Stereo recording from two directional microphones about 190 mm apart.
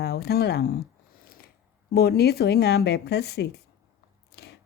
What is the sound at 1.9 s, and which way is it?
Speech, 55° left (ahead or behind).